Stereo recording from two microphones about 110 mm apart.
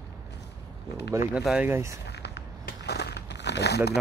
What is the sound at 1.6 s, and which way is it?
Speech, 25° right (ahead or behind).